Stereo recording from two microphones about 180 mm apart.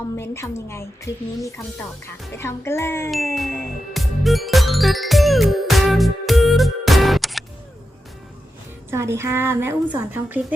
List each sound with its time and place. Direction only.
0.2 s a woman's voice: 15° left (ahead or behind)
3.3 s music: 5° left (ahead or behind)
8.9 s a woman's voice: 15° right (ahead or behind)